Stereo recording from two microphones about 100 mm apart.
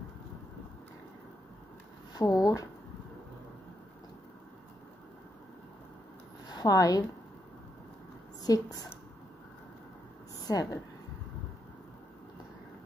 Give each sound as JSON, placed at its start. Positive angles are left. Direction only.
{"t": 2.1, "sound": "speech", "side_deg": 35}
{"t": 6.5, "sound": "a woman's voice", "side_deg": 40}
{"t": 8.4, "sound": "a woman's voice", "side_deg": 40}
{"t": 10.4, "sound": "a woman's voice", "side_deg": 35}